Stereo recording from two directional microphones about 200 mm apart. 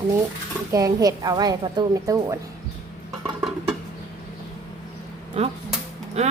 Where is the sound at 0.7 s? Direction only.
20° right (ahead or behind).